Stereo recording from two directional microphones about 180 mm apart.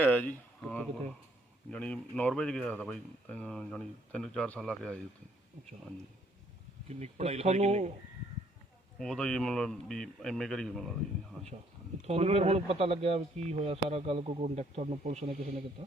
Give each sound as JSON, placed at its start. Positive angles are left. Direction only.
{"t": 0.0, "sound": "speech", "side_deg": 10}
{"t": 6.8, "sound": "speech", "side_deg": -35}
{"t": 9.0, "sound": "speech", "side_deg": 5}
{"t": 12.0, "sound": "speech", "side_deg": -35}